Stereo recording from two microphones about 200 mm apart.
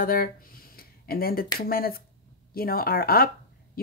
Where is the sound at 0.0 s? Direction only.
45° left (ahead or behind).